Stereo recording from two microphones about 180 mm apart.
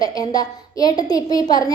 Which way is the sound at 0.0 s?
20° left (ahead or behind).